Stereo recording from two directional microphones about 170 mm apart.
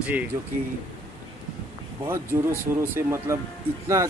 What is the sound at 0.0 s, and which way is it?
Speech, 10° right (ahead or behind).